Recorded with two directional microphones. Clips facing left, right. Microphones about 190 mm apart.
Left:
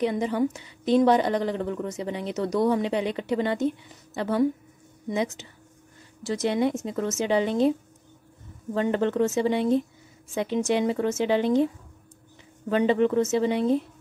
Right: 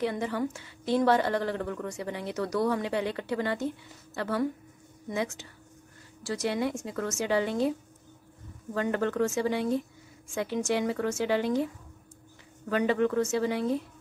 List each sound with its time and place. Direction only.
0.0 s a woman's voice: 20° left (ahead or behind)
8.7 s a woman's voice: 25° left (ahead or behind)
12.6 s a woman's voice: 25° left (ahead or behind)